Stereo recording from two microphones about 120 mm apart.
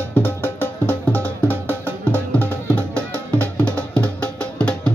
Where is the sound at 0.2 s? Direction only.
15° left (ahead or behind).